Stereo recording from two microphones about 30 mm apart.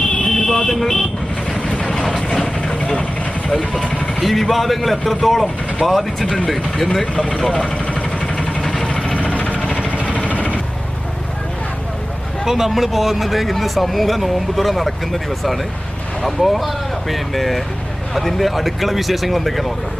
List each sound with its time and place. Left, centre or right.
0.3 s vehicle: centre
0.7 s speech: centre
1.5 s vehicle: left
1.9 s vehicle: centre
2.4 s vehicle: left
4.2 s speech: centre
7.2 s speech: left
8.9 s vehicle: left
9.1 s vehicle: left
12.5 s speech: centre